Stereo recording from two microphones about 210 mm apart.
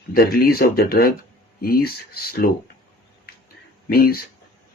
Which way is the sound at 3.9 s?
45° left (ahead or behind).